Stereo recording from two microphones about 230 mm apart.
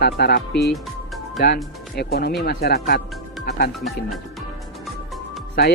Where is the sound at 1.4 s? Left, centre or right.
Left.